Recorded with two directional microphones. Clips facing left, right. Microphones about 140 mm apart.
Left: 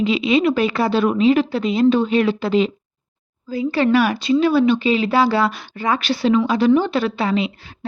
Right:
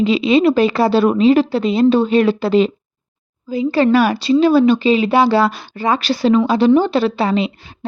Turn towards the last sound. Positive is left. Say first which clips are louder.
# right 3 dB
turn(degrees=-25)  # may be behind; listen again after turning